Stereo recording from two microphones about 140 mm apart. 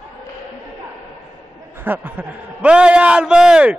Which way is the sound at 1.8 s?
10° right (ahead or behind).